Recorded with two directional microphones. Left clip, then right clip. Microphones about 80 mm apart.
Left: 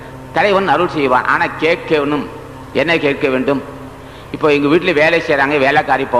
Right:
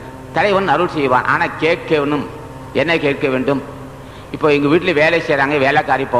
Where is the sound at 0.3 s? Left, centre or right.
Left.